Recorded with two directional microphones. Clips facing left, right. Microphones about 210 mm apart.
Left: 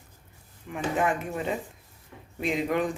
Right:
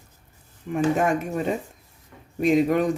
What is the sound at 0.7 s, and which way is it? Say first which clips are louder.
Speech: right 6 dB; 45° right (ahead or behind).